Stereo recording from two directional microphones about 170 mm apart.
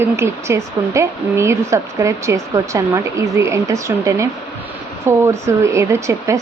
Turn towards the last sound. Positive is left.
turn(degrees=-20)  # may be behind; listen again after turning